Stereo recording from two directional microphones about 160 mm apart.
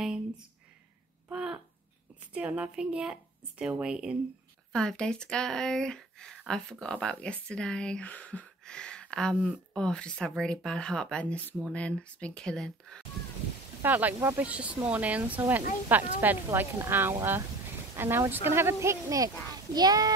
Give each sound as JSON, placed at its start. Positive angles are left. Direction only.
{"t": 0.0, "sound": "a sound", "side_deg": -5}
{"t": 2.3, "sound": "speech", "side_deg": -5}
{"t": 13.8, "sound": "speech", "side_deg": -10}